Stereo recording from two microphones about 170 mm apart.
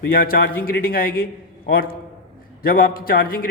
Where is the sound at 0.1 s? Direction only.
60° left (ahead or behind).